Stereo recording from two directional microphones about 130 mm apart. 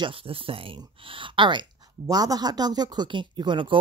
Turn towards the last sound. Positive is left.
turn(degrees=-35)  # may be behind; listen again after turning